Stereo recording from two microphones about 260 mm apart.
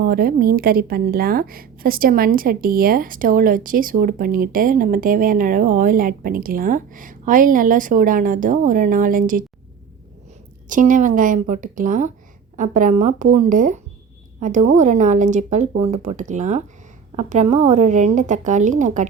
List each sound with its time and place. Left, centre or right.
0.0 s a woman's voice: right
10.7 s a woman's voice: right